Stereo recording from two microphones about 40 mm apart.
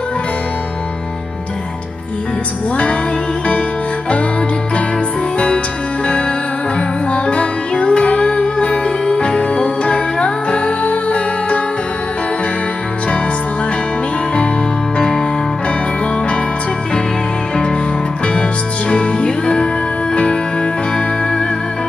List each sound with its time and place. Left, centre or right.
7.1 s music: left
18.2 s music: left